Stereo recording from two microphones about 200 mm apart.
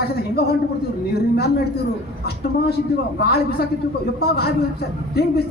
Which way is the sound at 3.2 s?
50° left (ahead or behind).